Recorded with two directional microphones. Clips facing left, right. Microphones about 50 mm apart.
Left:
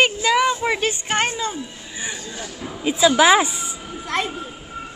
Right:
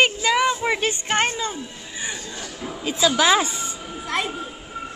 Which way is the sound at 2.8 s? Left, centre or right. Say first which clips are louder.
Left 4 dB; centre.